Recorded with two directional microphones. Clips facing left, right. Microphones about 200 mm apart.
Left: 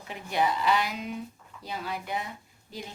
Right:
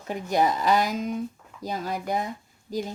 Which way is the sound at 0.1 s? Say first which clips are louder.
Right 5 dB; 40° right (ahead or behind).